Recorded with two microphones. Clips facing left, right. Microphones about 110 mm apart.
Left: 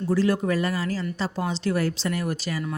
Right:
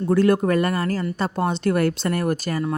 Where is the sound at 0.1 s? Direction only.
55° right (ahead or behind).